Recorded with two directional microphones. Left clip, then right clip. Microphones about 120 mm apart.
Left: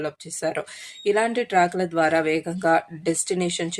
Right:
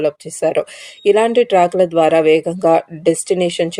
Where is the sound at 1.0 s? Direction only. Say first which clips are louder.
Right 10 dB; 25° right (ahead or behind).